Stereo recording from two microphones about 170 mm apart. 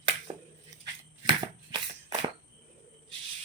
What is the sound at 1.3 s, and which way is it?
Shuffling cards, 30° right (ahead or behind).